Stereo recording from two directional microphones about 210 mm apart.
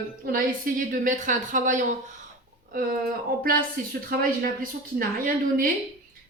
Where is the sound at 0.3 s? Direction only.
40° right (ahead or behind).